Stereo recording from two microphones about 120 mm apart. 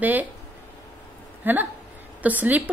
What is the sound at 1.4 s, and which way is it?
Speech, 15° right (ahead or behind).